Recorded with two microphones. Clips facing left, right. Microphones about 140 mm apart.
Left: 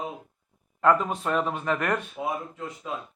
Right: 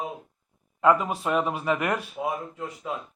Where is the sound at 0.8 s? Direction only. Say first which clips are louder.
Right 1 dB; 10° right (ahead or behind).